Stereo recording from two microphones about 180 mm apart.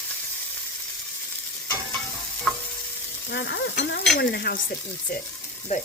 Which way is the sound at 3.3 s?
80° left.